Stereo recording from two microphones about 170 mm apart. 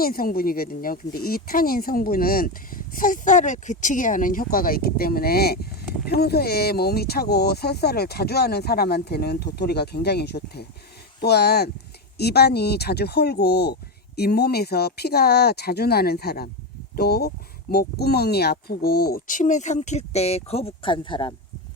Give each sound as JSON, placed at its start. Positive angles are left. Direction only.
{"t": 0.0, "sound": "speech", "side_deg": 60}